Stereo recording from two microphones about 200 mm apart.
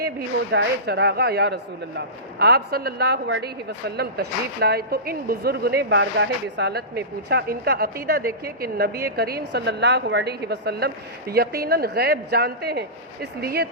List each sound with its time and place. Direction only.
0.0 s speech: 55° right (ahead or behind)